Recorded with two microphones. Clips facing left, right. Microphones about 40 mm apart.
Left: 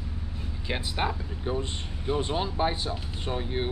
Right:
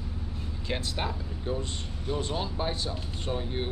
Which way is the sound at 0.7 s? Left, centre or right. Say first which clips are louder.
Left 3 dB; centre.